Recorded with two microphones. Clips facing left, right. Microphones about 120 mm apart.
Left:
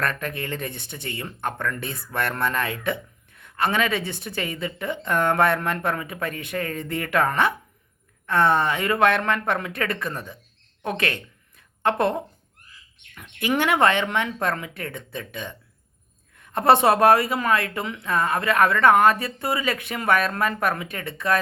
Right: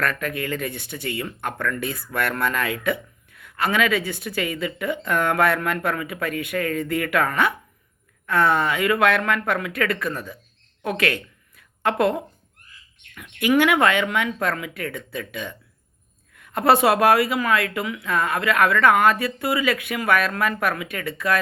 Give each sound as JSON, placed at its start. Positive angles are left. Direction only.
{"t": 0.0, "sound": "speech", "side_deg": 25}
{"t": 10.8, "sound": "a sound", "side_deg": 25}
{"t": 13.1, "sound": "speech", "side_deg": 30}